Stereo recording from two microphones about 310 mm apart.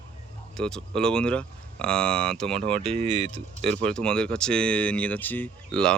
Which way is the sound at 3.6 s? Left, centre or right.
Centre.